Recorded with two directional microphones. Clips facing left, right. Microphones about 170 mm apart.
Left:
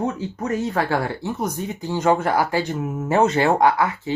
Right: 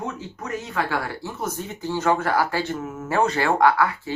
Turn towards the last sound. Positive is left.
turn(degrees=20)  # may be behind; listen again after turning